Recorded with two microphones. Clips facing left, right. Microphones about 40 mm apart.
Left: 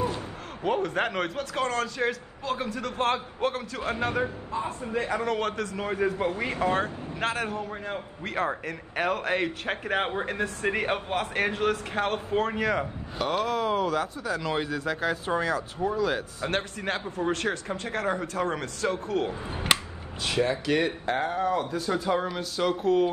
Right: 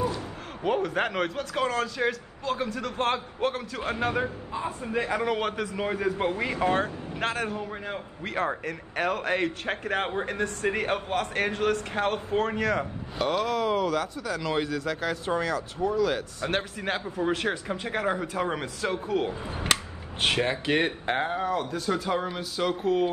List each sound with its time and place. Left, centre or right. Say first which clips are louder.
0.7 s a man's voice: even; centre
6.1 s speech: right 1 dB; right
6.7 s a man's voice: right 1 dB; centre
20.2 s speech: right 1 dB; right
21.7 s a man's voice: left 1 dB; centre